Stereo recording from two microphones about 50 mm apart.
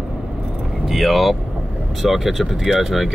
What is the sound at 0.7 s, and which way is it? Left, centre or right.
Speech, centre.